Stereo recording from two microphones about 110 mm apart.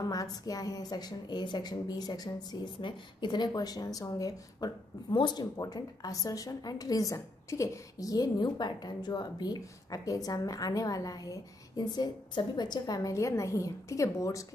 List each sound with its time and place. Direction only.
0.0 s a woman's voice: 35° left (ahead or behind)